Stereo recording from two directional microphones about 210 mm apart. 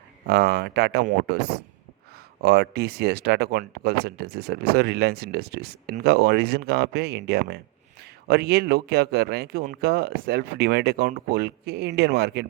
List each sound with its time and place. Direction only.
0.3 s speech: 50° right (ahead or behind)